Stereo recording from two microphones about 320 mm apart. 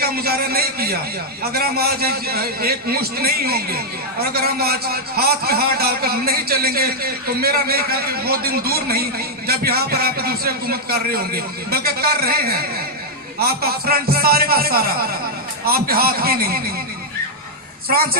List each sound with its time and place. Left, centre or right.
0.0 s a man's voice: right